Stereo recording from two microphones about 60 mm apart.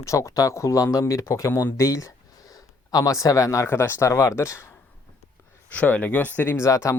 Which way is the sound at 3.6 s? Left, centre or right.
Left.